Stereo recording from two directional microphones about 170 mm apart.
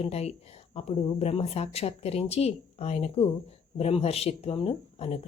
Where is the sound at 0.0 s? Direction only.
40° left (ahead or behind).